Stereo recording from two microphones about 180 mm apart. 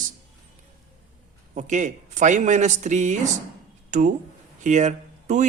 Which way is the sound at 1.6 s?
40° right (ahead or behind).